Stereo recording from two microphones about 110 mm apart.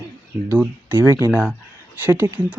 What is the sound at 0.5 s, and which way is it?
Speech, 15° right (ahead or behind).